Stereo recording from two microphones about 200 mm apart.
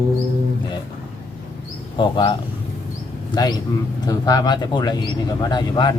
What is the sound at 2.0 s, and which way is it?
Speech, 25° left (ahead or behind).